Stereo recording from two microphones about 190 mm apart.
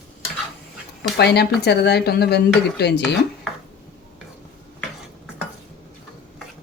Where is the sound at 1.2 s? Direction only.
60° left (ahead or behind).